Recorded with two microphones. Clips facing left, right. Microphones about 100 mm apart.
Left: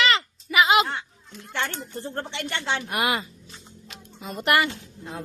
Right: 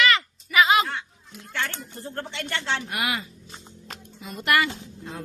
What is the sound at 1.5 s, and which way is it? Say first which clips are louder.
Speech: left 2 dB; 20° left (ahead or behind).